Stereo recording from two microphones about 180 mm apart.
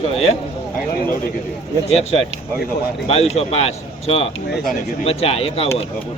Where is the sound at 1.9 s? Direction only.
35° left (ahead or behind).